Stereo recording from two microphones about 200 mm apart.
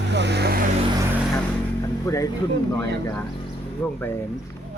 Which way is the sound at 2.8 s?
15° left (ahead or behind).